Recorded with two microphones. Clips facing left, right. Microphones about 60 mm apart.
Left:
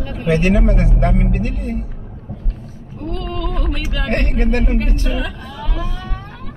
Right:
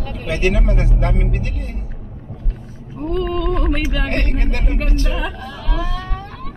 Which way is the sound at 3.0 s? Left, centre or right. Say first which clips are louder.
Right 5 dB; right.